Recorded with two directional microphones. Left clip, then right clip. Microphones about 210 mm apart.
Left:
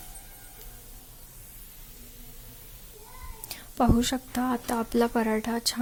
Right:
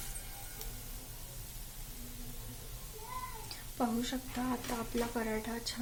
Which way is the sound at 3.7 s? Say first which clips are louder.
Left 11 dB; 50° left (ahead or behind).